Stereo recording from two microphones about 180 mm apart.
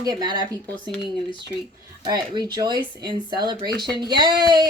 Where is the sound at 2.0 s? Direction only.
25° right (ahead or behind).